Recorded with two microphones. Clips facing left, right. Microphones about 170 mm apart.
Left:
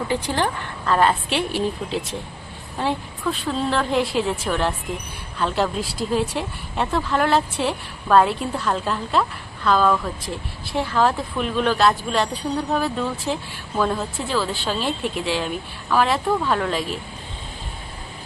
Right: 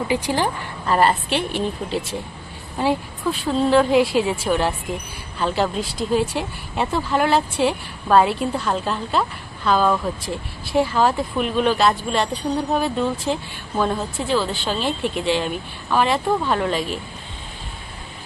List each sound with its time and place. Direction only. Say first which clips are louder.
0.1 s a woman's voice: right 2 dB; 10° right (ahead or behind)